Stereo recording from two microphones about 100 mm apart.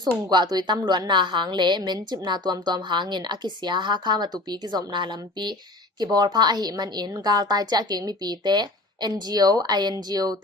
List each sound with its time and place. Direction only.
0.3 s a woman's voice: 45° right (ahead or behind)